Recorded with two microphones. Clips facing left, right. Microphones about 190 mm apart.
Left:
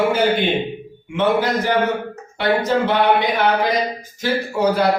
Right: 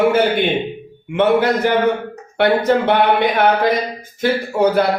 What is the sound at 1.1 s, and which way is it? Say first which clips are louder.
A man's voice: right 3 dB; 55° right (ahead or behind).